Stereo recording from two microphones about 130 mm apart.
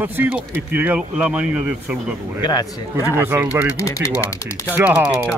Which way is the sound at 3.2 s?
20° right (ahead or behind).